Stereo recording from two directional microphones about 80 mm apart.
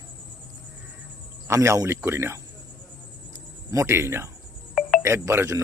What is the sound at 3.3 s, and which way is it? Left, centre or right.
Cricket, right.